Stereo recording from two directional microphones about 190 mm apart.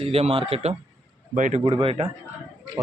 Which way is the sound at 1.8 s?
30° right (ahead or behind).